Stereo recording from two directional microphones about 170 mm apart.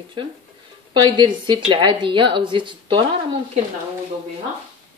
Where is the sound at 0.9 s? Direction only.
25° right (ahead or behind).